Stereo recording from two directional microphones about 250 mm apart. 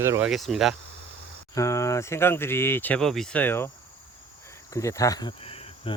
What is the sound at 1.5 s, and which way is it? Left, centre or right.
Speech, centre.